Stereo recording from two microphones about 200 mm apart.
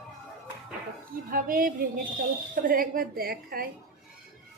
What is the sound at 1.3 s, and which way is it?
A woman's voice, 45° right (ahead or behind).